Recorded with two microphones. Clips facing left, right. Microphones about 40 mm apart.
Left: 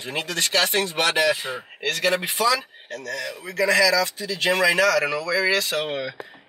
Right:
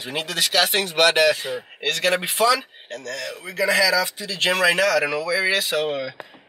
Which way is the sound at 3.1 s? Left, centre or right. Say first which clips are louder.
Even; centre.